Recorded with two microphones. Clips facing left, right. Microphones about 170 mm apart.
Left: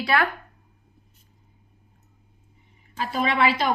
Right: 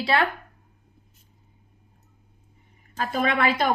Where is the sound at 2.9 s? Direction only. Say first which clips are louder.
Right 1 dB; 50° right (ahead or behind).